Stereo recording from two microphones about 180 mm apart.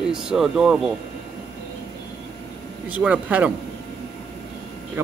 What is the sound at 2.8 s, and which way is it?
Speech, 10° right (ahead or behind).